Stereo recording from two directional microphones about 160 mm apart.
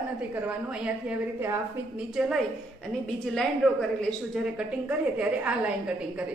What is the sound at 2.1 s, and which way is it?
A woman's voice, centre (ahead or behind).